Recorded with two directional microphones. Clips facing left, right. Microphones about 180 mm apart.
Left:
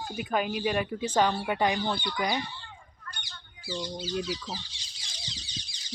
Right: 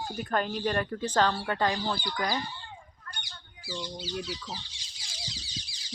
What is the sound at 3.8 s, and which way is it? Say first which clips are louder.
Speech: left 3 dB; 45° left (ahead or behind).